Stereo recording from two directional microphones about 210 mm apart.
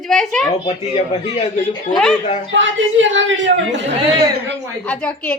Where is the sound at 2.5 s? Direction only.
65° right (ahead or behind).